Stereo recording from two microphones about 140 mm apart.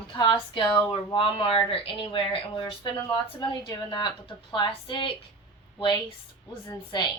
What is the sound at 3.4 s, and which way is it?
Speech, 30° left (ahead or behind).